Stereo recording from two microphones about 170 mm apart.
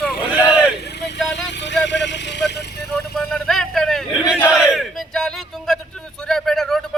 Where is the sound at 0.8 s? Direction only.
80° left.